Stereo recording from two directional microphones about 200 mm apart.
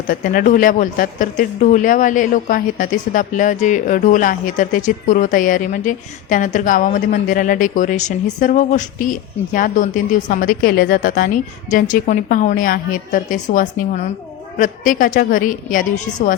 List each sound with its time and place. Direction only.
0.1 s a woman's voice: 45° left (ahead or behind)